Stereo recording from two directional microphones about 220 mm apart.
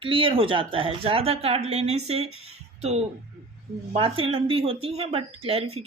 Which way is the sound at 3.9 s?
25° right (ahead or behind).